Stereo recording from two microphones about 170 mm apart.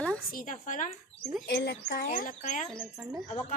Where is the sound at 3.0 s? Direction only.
Centre (ahead or behind).